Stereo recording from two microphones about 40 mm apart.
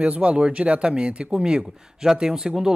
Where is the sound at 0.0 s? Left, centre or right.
Right.